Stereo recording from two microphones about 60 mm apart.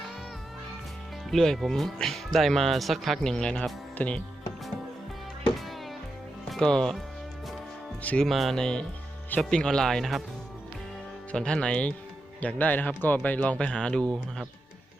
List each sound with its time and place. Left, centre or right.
1.3 s speech: centre
3.2 s speech: centre
6.6 s speech: centre
8.2 s speech: centre
8.6 s speech: centre
11.3 s speech: centre